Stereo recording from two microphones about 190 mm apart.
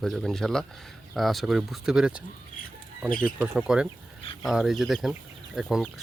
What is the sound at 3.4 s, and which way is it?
Speech, 5° right (ahead or behind).